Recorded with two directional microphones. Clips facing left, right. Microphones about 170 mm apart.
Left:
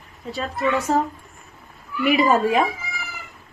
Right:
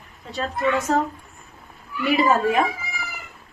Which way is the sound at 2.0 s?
15° left (ahead or behind).